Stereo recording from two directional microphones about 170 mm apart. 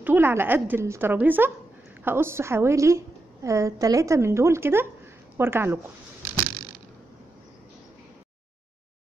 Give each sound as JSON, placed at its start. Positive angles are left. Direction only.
{"t": 0.0, "sound": "a woman's voice", "side_deg": -10}